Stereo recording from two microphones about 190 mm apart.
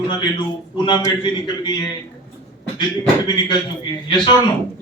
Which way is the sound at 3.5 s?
25° left (ahead or behind).